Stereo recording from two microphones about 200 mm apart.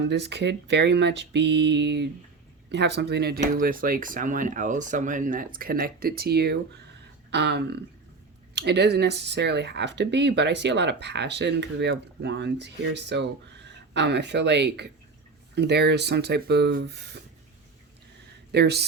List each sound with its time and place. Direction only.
0.1 s speech: 60° right (ahead or behind)
18.5 s speech: 55° right (ahead or behind)